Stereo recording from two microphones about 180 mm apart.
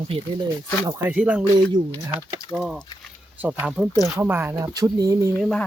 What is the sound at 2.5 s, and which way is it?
Speech, 5° right (ahead or behind).